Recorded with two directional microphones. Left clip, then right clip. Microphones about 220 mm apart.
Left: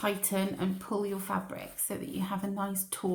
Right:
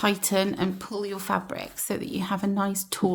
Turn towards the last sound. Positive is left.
turn(degrees=-45)  # may be behind; listen again after turning